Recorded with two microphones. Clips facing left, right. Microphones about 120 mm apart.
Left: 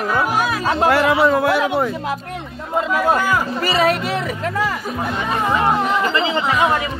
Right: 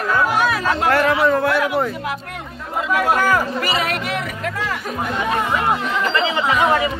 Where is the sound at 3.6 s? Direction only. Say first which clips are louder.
Left 5 dB; 30° left (ahead or behind).